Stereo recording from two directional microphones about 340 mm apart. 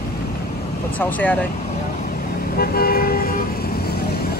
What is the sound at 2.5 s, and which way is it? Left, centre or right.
Toot, left.